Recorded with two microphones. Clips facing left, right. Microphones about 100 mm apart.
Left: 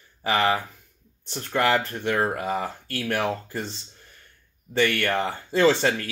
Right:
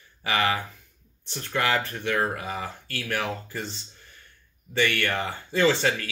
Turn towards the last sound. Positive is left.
turn(degrees=35)  # may be behind; listen again after turning